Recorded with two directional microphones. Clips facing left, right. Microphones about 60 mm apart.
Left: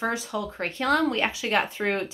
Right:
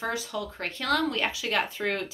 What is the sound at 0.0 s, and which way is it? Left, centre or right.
A woman's voice, left.